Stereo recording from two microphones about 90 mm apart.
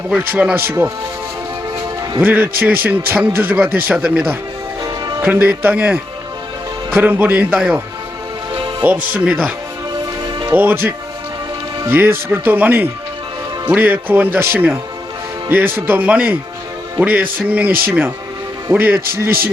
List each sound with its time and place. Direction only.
0.2 s speech: 20° right (ahead or behind)
2.2 s speech: 20° right (ahead or behind)
4.8 s music: 45° right (ahead or behind)
5.2 s speech: 15° right (ahead or behind)
8.8 s speech: 15° right (ahead or behind)
10.5 s speech: 20° right (ahead or behind)